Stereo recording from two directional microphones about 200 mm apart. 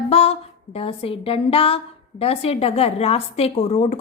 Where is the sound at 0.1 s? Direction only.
30° left (ahead or behind).